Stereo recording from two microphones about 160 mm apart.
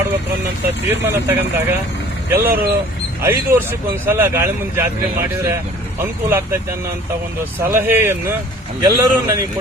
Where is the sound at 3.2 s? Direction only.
15° right (ahead or behind).